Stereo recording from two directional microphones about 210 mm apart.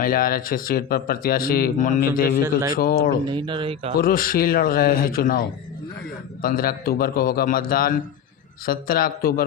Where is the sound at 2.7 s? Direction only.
45° left (ahead or behind).